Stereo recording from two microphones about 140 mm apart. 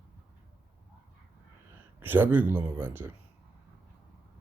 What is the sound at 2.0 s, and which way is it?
Speech, 15° right (ahead or behind).